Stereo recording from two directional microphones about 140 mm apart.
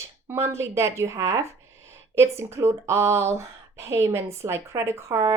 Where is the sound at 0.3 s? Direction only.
15° right (ahead or behind).